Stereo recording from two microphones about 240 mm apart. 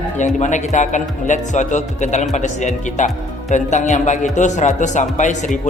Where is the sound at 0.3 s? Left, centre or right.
Left.